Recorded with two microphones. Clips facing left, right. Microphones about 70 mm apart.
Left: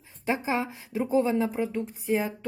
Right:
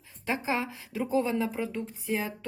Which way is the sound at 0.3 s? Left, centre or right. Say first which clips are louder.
Left 2 dB; left.